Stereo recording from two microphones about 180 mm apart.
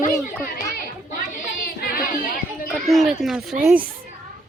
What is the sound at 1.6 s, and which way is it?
Child singing, 55° left (ahead or behind).